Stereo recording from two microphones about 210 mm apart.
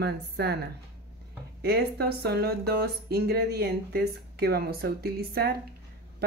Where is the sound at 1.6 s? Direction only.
50° right (ahead or behind).